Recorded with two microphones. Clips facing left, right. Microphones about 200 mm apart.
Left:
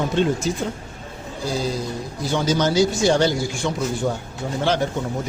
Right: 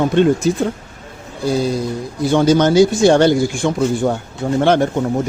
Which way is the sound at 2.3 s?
55° right (ahead or behind).